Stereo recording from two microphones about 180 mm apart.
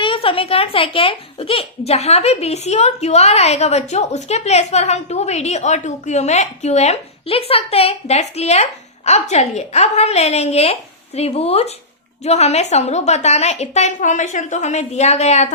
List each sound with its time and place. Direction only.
0.0 s a child's voice: 30° left (ahead or behind)